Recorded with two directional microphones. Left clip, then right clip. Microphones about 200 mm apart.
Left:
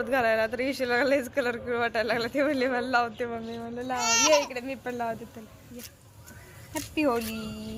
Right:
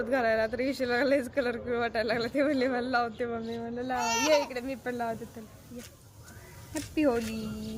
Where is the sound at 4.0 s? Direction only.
45° right (ahead or behind).